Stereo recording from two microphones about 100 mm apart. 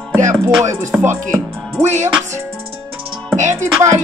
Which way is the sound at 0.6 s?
30° right (ahead or behind).